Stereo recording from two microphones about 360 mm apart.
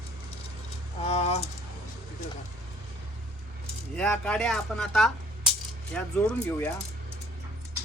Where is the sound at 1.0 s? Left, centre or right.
Centre.